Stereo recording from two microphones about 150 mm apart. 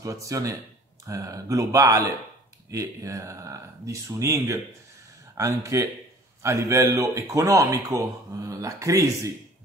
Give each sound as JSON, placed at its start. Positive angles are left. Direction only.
{"t": 0.0, "sound": "a man's voice", "side_deg": -20}